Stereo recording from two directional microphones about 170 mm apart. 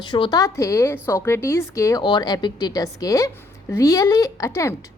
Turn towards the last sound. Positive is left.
turn(degrees=15)  # may be behind; listen again after turning